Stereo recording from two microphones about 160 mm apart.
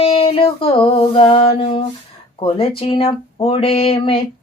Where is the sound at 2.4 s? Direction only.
35° left (ahead or behind).